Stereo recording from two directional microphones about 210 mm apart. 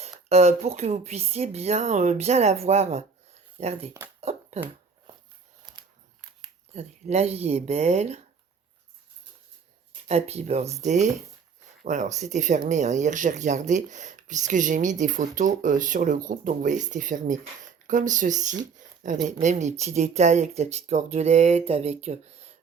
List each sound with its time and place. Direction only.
0.0 s speech: 30° right (ahead or behind)
4.2 s a sound: 30° right (ahead or behind)
6.7 s speech: 30° right (ahead or behind)
10.1 s speech: 30° right (ahead or behind)